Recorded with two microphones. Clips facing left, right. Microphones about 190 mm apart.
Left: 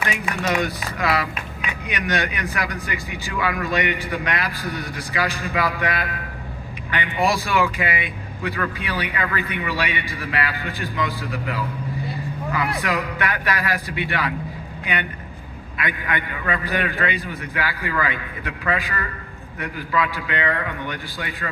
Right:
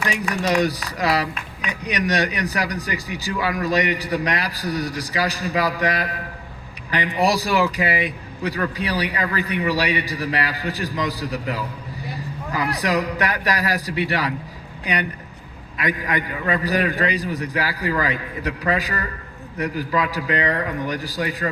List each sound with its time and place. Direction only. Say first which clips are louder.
0.0 s speech: right 2 dB; 35° right (ahead or behind)